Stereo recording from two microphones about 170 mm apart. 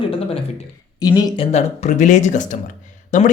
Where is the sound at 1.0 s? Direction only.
20° left (ahead or behind).